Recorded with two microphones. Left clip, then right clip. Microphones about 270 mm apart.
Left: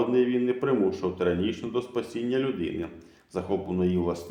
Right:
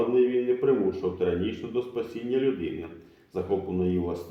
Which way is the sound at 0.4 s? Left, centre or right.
Left.